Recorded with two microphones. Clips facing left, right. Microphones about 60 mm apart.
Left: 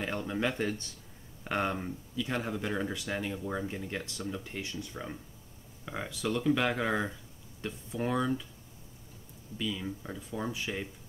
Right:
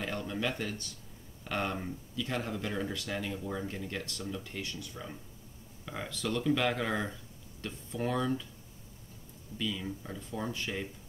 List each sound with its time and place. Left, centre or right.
0.0 s speech: centre
5.9 s speech: centre
9.6 s speech: centre